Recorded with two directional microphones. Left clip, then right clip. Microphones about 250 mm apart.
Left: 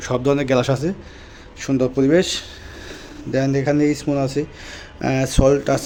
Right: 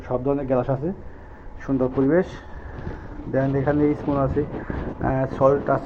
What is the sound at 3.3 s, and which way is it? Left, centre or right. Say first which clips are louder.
Speech: left 3 dB; left.